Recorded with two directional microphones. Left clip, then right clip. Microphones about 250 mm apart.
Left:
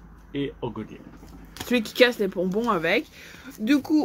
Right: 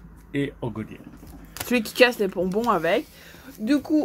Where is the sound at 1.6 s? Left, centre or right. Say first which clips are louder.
Right 1 dB; centre.